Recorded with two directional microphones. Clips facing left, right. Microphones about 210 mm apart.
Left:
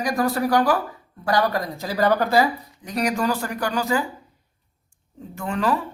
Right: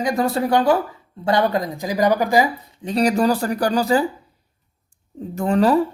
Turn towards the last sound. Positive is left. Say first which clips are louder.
# right 7 dB
turn(degrees=-35)  # may be behind; listen again after turning